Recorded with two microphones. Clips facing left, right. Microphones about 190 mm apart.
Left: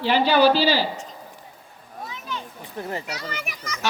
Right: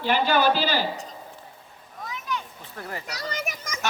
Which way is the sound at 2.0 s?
30° left (ahead or behind).